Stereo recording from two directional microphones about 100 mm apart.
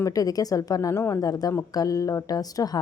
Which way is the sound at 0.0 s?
35° left (ahead or behind).